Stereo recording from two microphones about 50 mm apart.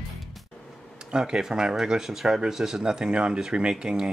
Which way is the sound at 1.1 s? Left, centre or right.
Centre.